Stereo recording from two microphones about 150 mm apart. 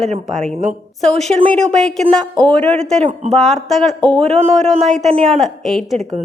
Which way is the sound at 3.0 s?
40° right (ahead or behind).